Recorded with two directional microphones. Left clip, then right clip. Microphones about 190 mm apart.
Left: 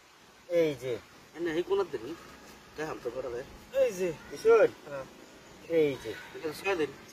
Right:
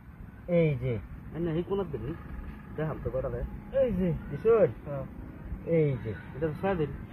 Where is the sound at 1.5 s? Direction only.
35° left (ahead or behind).